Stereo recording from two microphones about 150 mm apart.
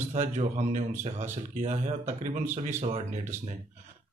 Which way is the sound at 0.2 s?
50° right (ahead or behind).